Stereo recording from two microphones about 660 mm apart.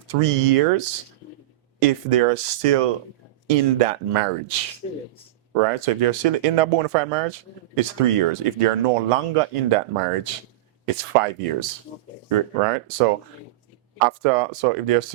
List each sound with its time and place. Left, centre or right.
0.2 s speech: right